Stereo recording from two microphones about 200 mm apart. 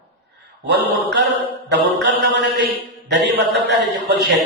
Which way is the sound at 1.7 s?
60° right (ahead or behind).